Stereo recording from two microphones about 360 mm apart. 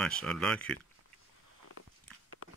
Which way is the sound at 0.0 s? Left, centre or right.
Centre.